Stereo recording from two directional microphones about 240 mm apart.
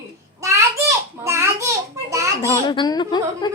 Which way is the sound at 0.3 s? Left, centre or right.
Centre.